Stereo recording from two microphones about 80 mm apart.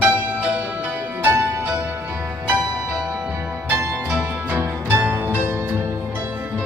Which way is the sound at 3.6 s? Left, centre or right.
Right.